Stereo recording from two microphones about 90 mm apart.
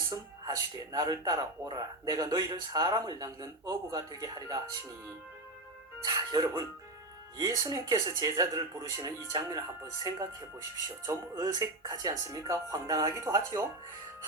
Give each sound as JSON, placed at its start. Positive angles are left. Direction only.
{"t": 0.1, "sound": "speech", "side_deg": -45}
{"t": 6.1, "sound": "speech", "side_deg": -45}
{"t": 9.5, "sound": "speech", "side_deg": -35}